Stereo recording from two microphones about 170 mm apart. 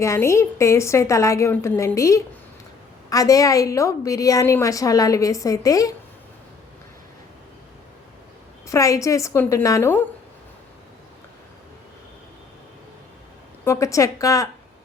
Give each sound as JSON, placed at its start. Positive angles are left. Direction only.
{"t": 0.0, "sound": "a woman's voice", "side_deg": 15}
{"t": 8.6, "sound": "a woman's voice", "side_deg": 20}
{"t": 13.7, "sound": "a woman's voice", "side_deg": 20}